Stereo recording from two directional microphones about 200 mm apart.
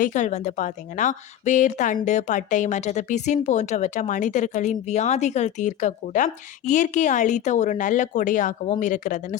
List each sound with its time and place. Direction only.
0.0 s a woman's voice: 40° left (ahead or behind)